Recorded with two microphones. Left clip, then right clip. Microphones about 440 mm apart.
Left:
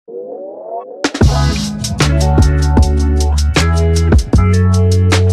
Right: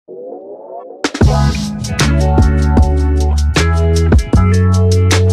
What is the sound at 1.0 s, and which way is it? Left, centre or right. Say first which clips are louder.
Music: right 1 dB; centre.